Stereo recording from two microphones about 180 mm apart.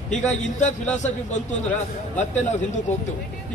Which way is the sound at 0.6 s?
40° left (ahead or behind).